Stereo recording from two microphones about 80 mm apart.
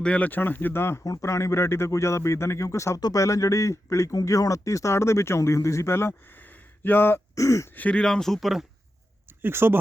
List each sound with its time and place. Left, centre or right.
0.0 s speech: centre
1.0 s speech: left
7.3 s speech: left
7.7 s speech: centre
8.0 s speech: centre
9.4 s speech: right